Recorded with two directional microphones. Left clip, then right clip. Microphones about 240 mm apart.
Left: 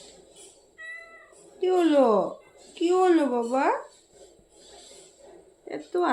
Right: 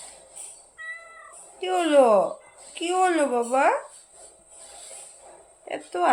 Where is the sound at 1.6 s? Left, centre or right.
Centre.